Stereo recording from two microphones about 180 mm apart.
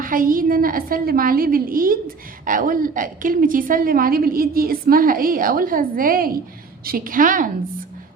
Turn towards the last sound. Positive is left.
turn(degrees=-50)  # may be behind; listen again after turning